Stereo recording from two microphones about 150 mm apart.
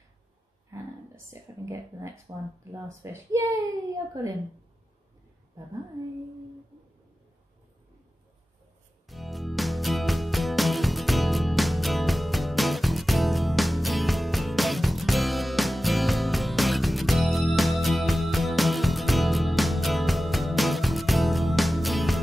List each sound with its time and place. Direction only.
1.3 s speech: 20° right (ahead or behind)
9.1 s music: centre (ahead or behind)